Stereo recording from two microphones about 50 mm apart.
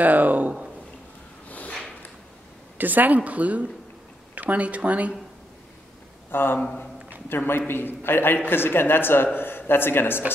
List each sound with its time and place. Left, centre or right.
0.0 s speech: right
2.8 s speech: right
6.3 s speech: left